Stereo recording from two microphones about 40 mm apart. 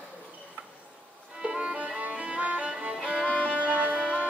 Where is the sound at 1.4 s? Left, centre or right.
Centre.